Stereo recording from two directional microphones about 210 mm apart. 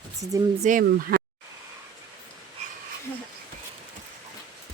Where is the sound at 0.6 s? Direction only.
40° right (ahead or behind).